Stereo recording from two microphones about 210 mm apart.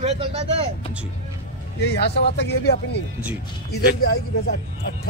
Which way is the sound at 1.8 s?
55° left (ahead or behind).